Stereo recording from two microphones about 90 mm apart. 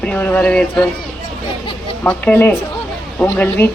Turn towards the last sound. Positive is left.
turn(degrees=20)  # may be behind; listen again after turning